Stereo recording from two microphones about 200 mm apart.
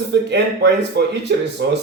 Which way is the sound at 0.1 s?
60° right (ahead or behind).